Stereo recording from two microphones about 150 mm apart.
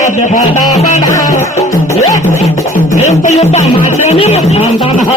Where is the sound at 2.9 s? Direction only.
50° left (ahead or behind).